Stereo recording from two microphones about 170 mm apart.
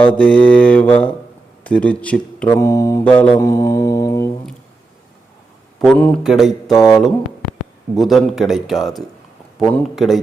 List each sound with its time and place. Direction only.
0.0 s mantra: 10° left (ahead or behind)
1.6 s speech: 5° left (ahead or behind)
2.5 s mantra: 20° left (ahead or behind)
3.1 s mantra: 10° left (ahead or behind)
3.3 s mantra: 20° left (ahead or behind)
5.8 s a man's voice: centre (ahead or behind)
6.5 s mantra: 20° left (ahead or behind)
7.9 s a man's voice: centre (ahead or behind)